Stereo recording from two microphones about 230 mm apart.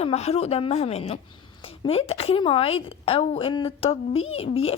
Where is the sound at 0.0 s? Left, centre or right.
Left.